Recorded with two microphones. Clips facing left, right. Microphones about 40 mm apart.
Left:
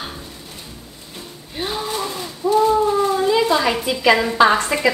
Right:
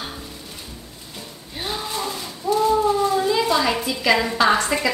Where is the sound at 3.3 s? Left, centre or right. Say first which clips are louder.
Left 3 dB; centre.